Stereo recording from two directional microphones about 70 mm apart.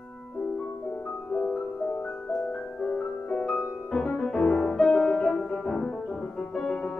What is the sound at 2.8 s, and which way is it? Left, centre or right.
Music, centre.